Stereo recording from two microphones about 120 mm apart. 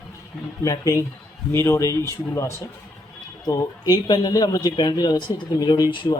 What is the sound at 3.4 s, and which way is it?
Speech, 35° left (ahead or behind).